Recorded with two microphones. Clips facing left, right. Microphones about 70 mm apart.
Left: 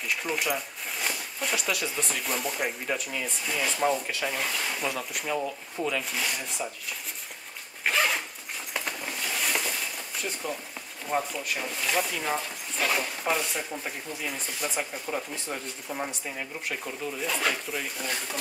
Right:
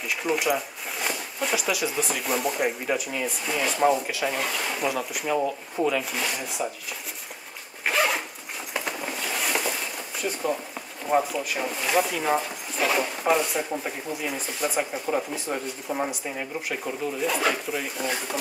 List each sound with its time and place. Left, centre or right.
0.0 s speech: centre
7.8 s zipper: centre
8.7 s a sound: centre
11.1 s speech: centre